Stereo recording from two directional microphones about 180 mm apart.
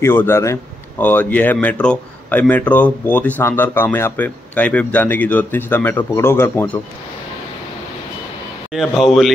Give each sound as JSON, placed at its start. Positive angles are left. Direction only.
{"t": 0.0, "sound": "speech", "side_deg": 15}
{"t": 8.7, "sound": "a man's voice", "side_deg": 0}